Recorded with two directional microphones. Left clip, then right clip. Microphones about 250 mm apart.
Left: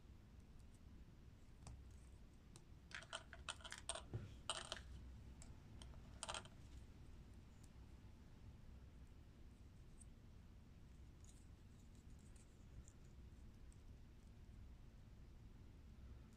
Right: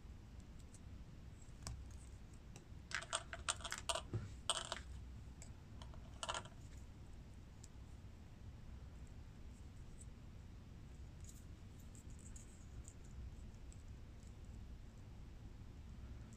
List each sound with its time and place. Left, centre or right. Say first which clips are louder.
2.9 s typing: right 9 dB; centre
4.5 s a sound: right 6 dB; centre
5.8 s typing: right 6 dB; centre